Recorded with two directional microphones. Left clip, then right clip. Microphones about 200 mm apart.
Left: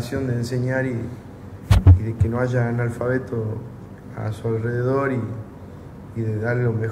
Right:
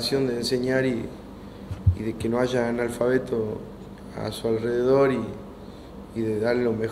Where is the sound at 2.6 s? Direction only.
65° right (ahead or behind).